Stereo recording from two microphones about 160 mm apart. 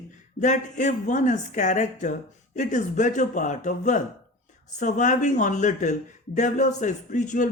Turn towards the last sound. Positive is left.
turn(degrees=50)  # may be behind; listen again after turning